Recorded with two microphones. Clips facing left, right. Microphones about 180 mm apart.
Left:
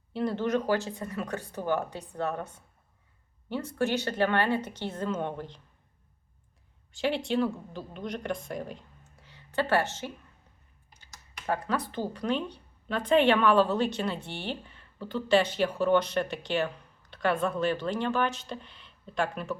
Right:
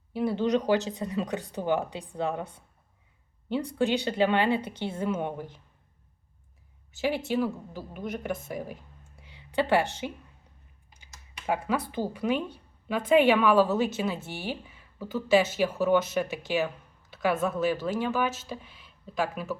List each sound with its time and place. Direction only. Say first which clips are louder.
0.1 s a woman's voice: right 2 dB; 5° right (ahead or behind)
7.0 s a woman's voice: even; 5° right (ahead or behind)
9.1 s a sound: right 2 dB; 15° right (ahead or behind)
11.1 s a woman's voice: right 2 dB; 10° right (ahead or behind)